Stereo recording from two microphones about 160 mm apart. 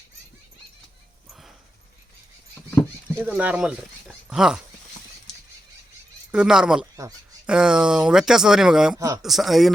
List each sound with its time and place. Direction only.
1.3 s a sound: centre (ahead or behind)
3.2 s speech: 10° right (ahead or behind)
6.3 s speech: 5° right (ahead or behind)
9.0 s speech: 20° right (ahead or behind)
9.2 s speech: centre (ahead or behind)